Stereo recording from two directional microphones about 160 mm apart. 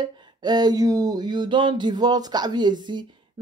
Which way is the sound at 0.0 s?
30° right (ahead or behind).